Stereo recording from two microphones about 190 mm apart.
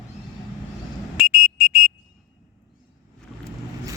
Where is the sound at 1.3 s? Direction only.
55° right (ahead or behind).